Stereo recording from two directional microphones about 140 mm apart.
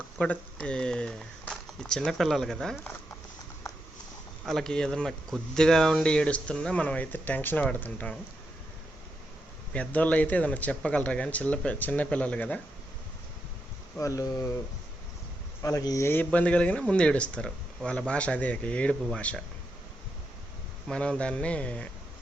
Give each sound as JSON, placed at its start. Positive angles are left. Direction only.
{"t": 0.2, "sound": "speech", "side_deg": 10}
{"t": 4.4, "sound": "speech", "side_deg": 5}
{"t": 9.7, "sound": "speech", "side_deg": 10}
{"t": 14.0, "sound": "speech", "side_deg": 25}
{"t": 15.6, "sound": "speech", "side_deg": 25}
{"t": 20.8, "sound": "speech", "side_deg": 5}